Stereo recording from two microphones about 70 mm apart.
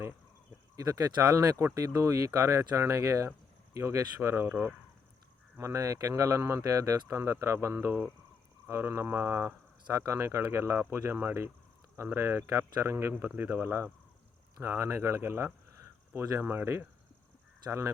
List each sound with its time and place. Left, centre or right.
0.8 s speech: right
5.5 s speech: right